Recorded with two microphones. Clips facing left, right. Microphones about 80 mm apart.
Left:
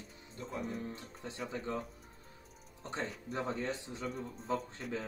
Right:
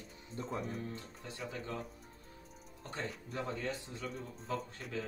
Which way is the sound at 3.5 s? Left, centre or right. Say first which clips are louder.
Left 2 dB; left.